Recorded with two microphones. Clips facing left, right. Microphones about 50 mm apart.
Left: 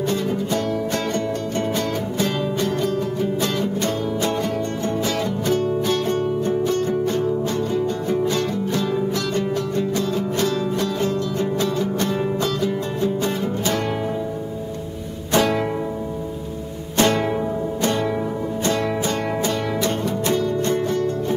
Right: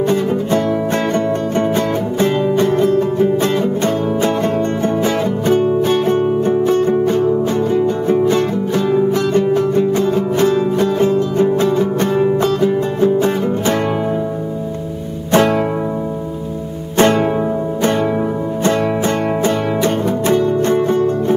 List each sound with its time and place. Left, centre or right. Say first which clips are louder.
2.1 s music: right 9 dB; right
5.5 s music: right 7 dB; right
15.3 s music: right 6 dB; right
17.0 s music: right 6 dB; right
18.6 s music: right 6 dB; right